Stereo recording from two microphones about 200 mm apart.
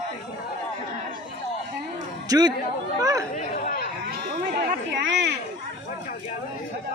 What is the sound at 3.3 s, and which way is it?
Speech, 35° left (ahead or behind).